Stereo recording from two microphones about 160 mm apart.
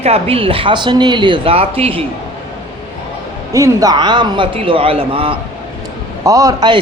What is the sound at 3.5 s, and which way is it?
Speech, 20° right (ahead or behind).